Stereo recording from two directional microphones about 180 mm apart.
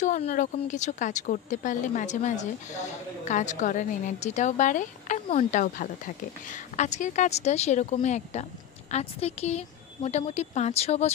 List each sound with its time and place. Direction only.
0.0 s a woman's voice: 45° left (ahead or behind)